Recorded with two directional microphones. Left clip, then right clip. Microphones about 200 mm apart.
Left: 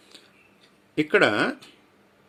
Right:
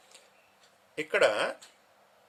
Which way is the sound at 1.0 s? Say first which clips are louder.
Left 6 dB; 10° left (ahead or behind).